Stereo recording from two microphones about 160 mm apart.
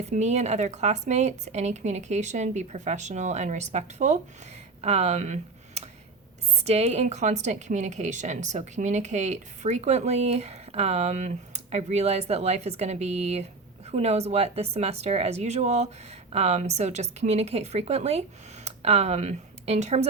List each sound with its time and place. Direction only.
0.0 s a woman's voice: 45° right (ahead or behind)